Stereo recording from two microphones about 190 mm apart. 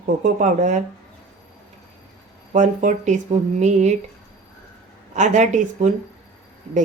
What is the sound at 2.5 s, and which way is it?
Speech, 40° right (ahead or behind).